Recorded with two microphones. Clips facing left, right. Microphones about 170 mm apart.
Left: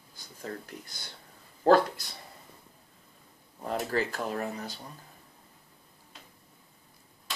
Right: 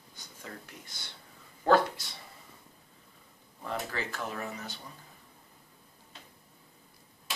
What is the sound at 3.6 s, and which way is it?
Speech, 40° left (ahead or behind).